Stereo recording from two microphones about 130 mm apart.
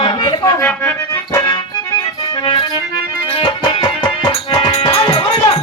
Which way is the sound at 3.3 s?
45° left (ahead or behind).